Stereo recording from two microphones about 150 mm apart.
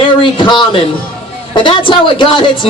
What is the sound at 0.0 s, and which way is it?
A man's voice, 35° left (ahead or behind).